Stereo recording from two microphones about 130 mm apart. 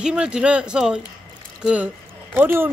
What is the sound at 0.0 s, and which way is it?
Speech, 5° right (ahead or behind).